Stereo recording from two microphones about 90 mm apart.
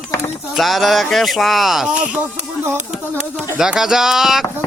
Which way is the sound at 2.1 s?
15° right (ahead or behind).